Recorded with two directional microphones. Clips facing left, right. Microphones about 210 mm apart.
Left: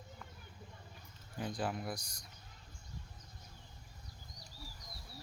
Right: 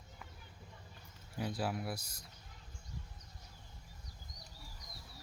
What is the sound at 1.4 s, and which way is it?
Speech, 5° right (ahead or behind).